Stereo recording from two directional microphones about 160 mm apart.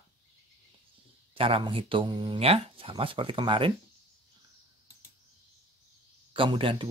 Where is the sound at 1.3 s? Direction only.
35° right (ahead or behind).